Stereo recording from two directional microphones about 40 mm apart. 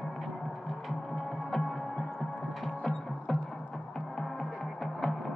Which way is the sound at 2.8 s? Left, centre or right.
Centre.